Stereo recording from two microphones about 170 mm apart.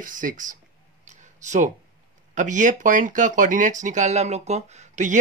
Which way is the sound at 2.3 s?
50° right (ahead or behind).